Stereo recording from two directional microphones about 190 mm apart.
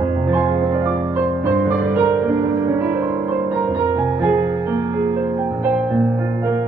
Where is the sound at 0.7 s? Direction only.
10° right (ahead or behind).